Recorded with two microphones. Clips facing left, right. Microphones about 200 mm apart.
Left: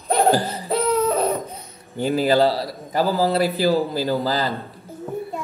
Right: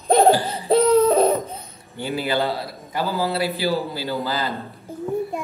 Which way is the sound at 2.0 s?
40° left (ahead or behind).